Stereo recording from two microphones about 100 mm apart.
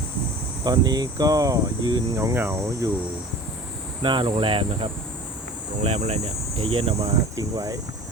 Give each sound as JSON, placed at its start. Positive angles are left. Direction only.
{"t": 0.6, "sound": "speech", "side_deg": -40}
{"t": 2.1, "sound": "speech", "side_deg": -25}
{"t": 4.0, "sound": "speech", "side_deg": -55}
{"t": 5.8, "sound": "speech", "side_deg": -90}
{"t": 7.3, "sound": "speech", "side_deg": -35}